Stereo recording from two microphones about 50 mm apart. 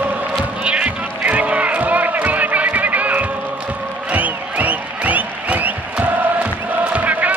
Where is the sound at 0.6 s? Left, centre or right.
Right.